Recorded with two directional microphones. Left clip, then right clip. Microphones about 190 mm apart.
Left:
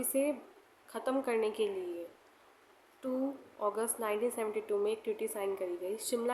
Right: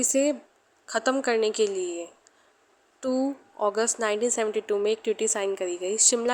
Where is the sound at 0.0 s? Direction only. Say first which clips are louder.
Right 9 dB; 35° right (ahead or behind).